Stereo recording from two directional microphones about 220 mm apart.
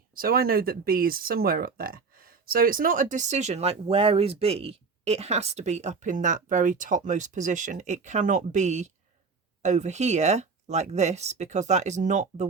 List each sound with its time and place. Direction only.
0.1 s speech: 40° right (ahead or behind)